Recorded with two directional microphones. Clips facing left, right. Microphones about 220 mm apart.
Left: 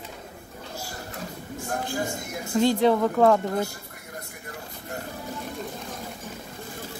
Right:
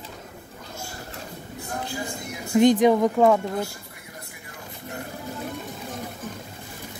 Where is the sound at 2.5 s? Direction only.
15° right (ahead or behind).